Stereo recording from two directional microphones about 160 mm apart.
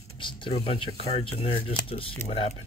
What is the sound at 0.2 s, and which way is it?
Speech, 30° left (ahead or behind).